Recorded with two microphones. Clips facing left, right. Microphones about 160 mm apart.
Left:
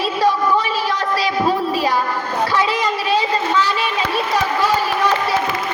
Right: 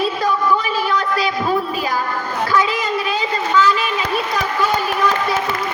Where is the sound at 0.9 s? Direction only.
35° left (ahead or behind).